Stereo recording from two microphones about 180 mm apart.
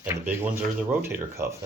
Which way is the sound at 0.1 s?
10° right (ahead or behind).